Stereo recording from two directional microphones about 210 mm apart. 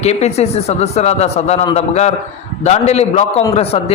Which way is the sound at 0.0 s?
30° left (ahead or behind).